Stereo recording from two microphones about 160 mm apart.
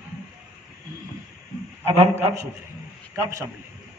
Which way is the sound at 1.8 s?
40° right (ahead or behind).